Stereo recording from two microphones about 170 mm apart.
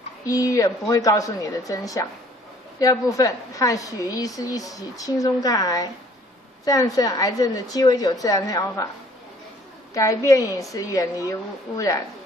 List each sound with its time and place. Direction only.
0.2 s a woman's voice: 20° left (ahead or behind)
9.9 s a woman's voice: 20° left (ahead or behind)